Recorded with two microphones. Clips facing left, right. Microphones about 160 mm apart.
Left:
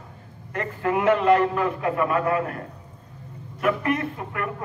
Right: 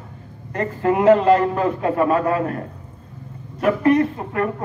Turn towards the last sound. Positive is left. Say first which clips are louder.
# right 9 dB
turn(degrees=-30)  # may be behind; listen again after turning